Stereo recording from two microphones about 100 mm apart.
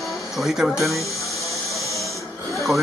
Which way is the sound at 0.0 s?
Centre (ahead or behind).